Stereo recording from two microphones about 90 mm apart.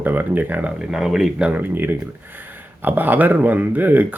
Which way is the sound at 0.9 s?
5° right (ahead or behind).